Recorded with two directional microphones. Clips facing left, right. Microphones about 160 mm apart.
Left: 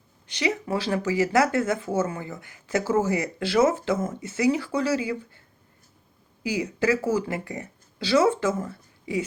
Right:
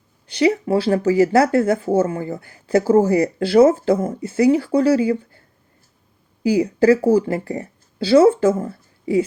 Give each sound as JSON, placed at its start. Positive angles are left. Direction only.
{"t": 0.3, "sound": "speech", "side_deg": -30}
{"t": 6.4, "sound": "speech", "side_deg": -30}